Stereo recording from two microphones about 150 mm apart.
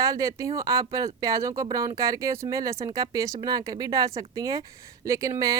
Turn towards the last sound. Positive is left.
turn(degrees=-20)  # may be behind; listen again after turning